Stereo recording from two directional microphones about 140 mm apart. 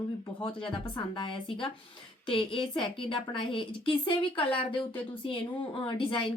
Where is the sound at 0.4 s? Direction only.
35° left (ahead or behind).